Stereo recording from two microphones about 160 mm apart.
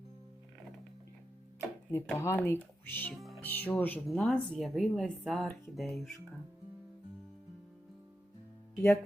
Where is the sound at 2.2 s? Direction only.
15° left (ahead or behind).